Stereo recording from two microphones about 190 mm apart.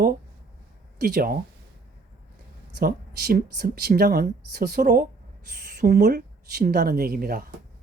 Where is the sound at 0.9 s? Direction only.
50° right (ahead or behind).